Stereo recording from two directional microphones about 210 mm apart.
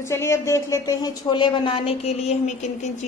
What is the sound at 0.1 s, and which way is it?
A woman's voice, 15° left (ahead or behind).